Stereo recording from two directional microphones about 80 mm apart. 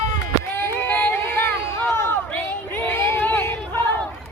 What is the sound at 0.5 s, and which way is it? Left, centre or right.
Female singing, left.